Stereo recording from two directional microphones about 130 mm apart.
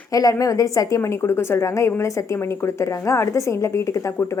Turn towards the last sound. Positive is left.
turn(degrees=20)  # may be behind; listen again after turning